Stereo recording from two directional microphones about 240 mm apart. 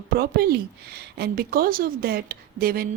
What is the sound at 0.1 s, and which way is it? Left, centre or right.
Speech, right.